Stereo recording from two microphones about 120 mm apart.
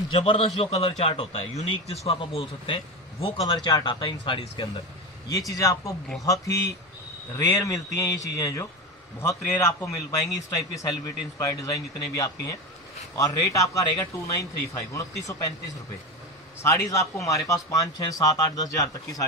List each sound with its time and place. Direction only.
0.1 s a man's voice: 45° left (ahead or behind)
3.4 s speech: 35° left (ahead or behind)
5.5 s speech: 25° left (ahead or behind)
16.6 s speech: 25° left (ahead or behind)